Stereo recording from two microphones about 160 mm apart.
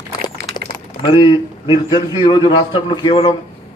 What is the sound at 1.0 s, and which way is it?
A man's voice, 30° left (ahead or behind).